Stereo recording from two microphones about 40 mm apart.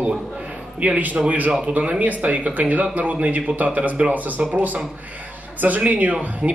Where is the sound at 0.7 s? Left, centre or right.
Right.